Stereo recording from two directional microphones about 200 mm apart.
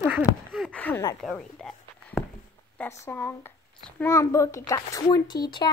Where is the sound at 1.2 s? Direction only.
Centre (ahead or behind).